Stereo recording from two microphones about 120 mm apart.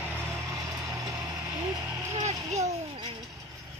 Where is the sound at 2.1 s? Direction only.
70° right (ahead or behind).